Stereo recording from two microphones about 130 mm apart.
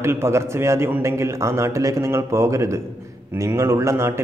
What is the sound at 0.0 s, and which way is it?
A man's voice, 20° right (ahead or behind).